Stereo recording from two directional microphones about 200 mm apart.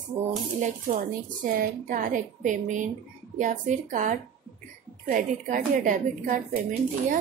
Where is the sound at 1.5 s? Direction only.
45° right (ahead or behind).